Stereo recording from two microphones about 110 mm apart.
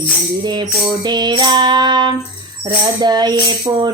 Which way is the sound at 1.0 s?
40° right (ahead or behind).